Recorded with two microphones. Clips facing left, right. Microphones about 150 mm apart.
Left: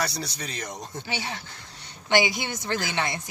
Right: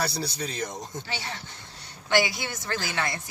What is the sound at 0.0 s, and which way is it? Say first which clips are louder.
Speech: right 1 dB; 30° right (ahead or behind).